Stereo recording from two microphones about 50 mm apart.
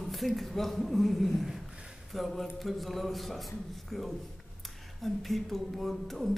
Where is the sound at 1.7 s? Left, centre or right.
Centre.